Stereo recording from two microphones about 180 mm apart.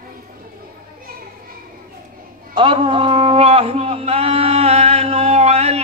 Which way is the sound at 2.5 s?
30° right (ahead or behind).